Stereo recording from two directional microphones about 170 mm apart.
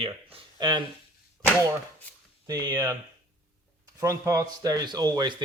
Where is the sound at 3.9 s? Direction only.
20° right (ahead or behind).